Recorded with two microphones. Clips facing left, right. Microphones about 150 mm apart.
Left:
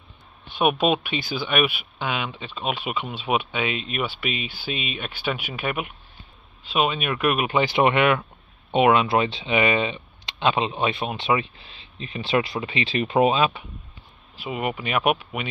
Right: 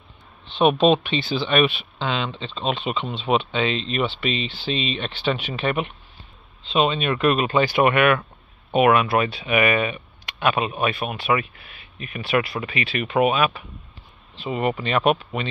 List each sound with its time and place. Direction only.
0.6 s speech: 10° left (ahead or behind)
14.3 s speech: 5° left (ahead or behind)